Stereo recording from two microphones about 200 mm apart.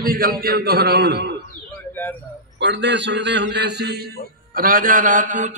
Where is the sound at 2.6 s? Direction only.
60° right (ahead or behind).